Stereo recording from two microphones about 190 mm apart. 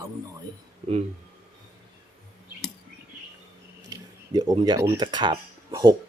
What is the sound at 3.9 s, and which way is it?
Speech, 20° right (ahead or behind).